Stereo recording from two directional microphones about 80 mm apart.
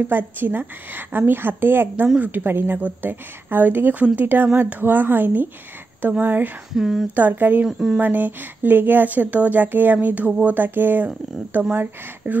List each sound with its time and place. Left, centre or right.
0.1 s speech: right
6.7 s speech: centre
7.2 s speech: right
7.6 s speech: centre
8.0 s speech: right